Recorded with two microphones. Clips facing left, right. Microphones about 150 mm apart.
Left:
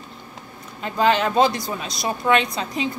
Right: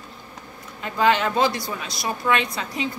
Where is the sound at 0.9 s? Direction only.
20° left (ahead or behind).